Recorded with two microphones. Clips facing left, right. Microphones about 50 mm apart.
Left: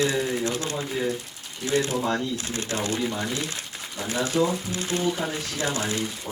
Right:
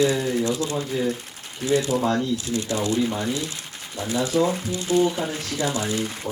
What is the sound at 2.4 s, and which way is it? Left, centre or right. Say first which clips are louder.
Speech: right 4 dB; left.